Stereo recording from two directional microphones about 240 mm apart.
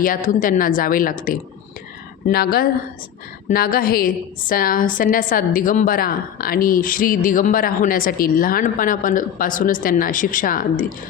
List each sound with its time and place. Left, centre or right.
0.0 s a woman's voice: left
2.2 s a woman's voice: left